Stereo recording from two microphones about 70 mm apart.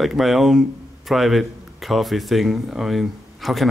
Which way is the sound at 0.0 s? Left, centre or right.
Centre.